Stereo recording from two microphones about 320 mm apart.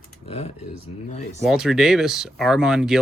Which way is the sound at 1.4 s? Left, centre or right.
Centre.